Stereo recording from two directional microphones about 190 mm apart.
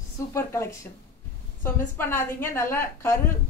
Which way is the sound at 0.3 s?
15° left (ahead or behind).